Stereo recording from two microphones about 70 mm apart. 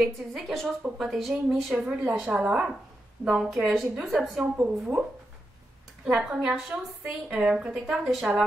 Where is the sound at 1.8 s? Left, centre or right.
Centre.